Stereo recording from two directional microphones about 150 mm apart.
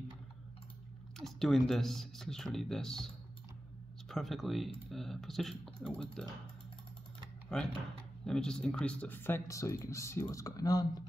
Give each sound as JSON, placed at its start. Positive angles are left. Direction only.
{"t": 1.1, "sound": "speech", "side_deg": 0}
{"t": 4.1, "sound": "speech", "side_deg": 0}
{"t": 7.5, "sound": "speech", "side_deg": 5}